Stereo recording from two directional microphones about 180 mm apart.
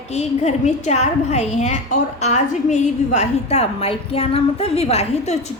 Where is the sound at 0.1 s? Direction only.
35° left (ahead or behind).